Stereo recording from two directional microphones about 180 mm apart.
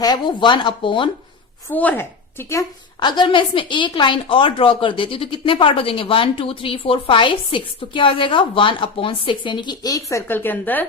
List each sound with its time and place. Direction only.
0.0 s a woman's voice: 25° left (ahead or behind)
1.7 s a woman's voice: 10° left (ahead or behind)